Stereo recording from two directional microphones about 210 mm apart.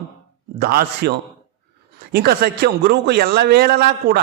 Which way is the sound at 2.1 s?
50° right (ahead or behind).